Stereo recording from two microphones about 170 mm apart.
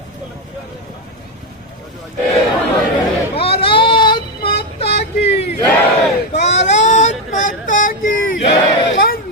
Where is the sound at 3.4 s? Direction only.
35° left (ahead or behind).